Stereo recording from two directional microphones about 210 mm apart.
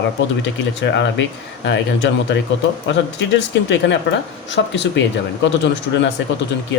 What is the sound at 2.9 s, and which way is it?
Speech, 60° left (ahead or behind).